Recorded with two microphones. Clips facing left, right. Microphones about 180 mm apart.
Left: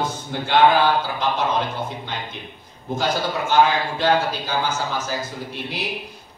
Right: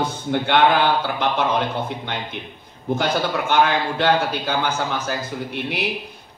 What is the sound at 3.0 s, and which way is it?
A man's voice, 60° right (ahead or behind).